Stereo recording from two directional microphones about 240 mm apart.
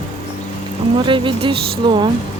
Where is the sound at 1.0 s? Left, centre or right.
Right.